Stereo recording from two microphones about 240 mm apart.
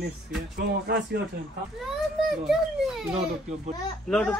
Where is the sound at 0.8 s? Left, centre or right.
Right.